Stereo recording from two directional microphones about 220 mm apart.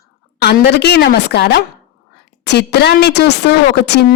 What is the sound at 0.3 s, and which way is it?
A woman's voice, 50° left (ahead or behind).